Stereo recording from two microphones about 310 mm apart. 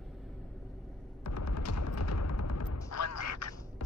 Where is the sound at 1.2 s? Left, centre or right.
Left.